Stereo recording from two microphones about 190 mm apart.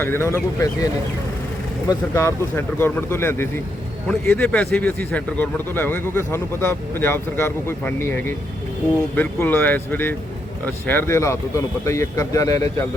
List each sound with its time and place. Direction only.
0.0 s a man's voice: 15° left (ahead or behind)
1.9 s a man's voice: 15° left (ahead or behind)